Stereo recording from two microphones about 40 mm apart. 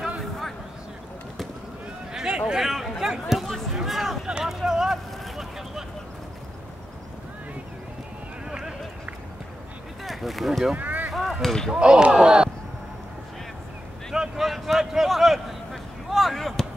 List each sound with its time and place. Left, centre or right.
2.1 s a sound: centre
4.6 s vehicle: centre
8.5 s run: right
10.0 s speech: centre
10.8 s rowboat: right
11.1 s a sound: centre
11.4 s speech: centre
11.7 s speech: right
14.1 s a sound: centre